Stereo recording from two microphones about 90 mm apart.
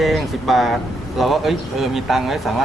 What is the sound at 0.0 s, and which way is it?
Speech, centre (ahead or behind).